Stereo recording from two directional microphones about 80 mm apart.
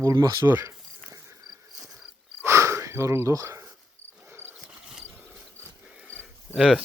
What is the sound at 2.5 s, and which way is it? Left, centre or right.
Wheeze, right.